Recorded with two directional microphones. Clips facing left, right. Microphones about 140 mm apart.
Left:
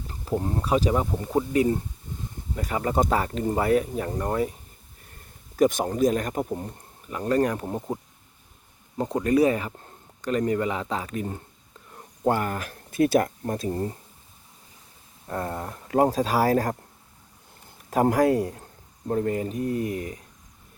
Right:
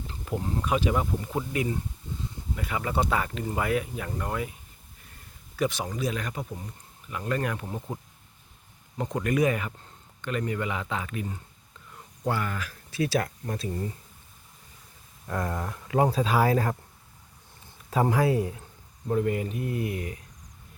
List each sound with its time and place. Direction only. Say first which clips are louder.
0.1 s speech: left 5 dB; 35° left (ahead or behind)
5.5 s speech: left 8 dB; 45° left (ahead or behind)
9.0 s speech: left 5 dB; 30° left (ahead or behind)
15.3 s speech: left 1 dB; 30° left (ahead or behind)
17.9 s a man's voice: left 4 dB; 45° left (ahead or behind)